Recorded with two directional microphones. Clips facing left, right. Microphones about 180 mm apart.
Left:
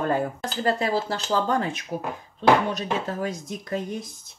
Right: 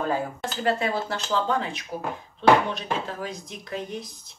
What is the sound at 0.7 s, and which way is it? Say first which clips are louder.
Speech: left 1 dB; 35° left (ahead or behind).